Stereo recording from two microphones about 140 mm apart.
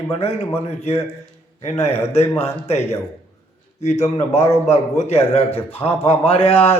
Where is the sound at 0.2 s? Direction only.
45° left (ahead or behind).